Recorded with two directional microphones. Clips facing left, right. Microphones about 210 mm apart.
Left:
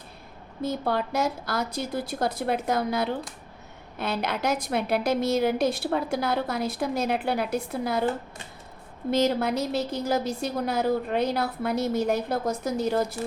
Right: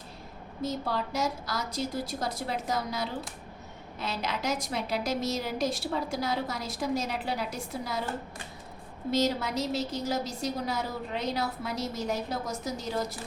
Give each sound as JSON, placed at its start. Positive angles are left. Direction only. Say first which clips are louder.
{"t": 0.6, "sound": "a woman's voice", "louder": "left 4 dB", "side_deg": 60}
{"t": 9.0, "sound": "a woman's voice", "louder": "left 4 dB", "side_deg": 55}